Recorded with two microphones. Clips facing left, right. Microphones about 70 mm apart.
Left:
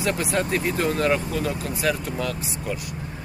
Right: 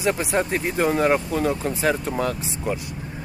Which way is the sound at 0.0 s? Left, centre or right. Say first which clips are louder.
Right 2 dB; centre.